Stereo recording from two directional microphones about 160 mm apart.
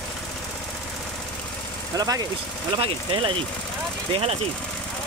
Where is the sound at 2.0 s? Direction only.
20° right (ahead or behind).